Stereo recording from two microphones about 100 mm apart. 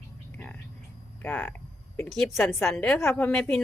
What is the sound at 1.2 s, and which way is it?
Speech, 20° left (ahead or behind).